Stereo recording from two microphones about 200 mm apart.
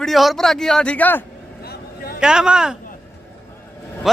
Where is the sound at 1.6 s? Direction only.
50° left (ahead or behind).